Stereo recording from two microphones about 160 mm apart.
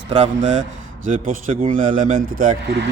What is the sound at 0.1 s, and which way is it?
A man's voice, 45° right (ahead or behind).